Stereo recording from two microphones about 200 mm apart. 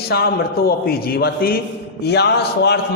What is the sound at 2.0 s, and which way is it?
Music, 55° left (ahead or behind).